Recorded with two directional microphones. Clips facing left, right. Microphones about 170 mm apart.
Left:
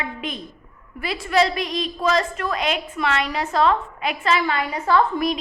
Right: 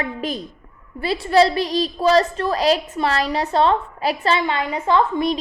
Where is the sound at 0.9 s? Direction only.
30° right (ahead or behind).